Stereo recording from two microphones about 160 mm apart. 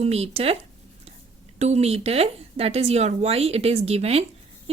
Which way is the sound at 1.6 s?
40° right (ahead or behind).